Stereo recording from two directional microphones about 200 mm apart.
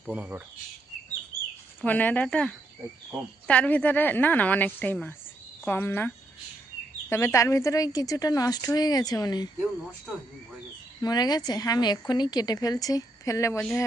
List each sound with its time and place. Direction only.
0.0 s speech: 5° right (ahead or behind)
1.8 s a woman's voice: 10° left (ahead or behind)
11.0 s a woman's voice: 20° left (ahead or behind)